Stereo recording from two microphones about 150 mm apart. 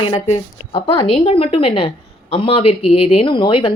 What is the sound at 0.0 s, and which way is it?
Speech, 40° left (ahead or behind).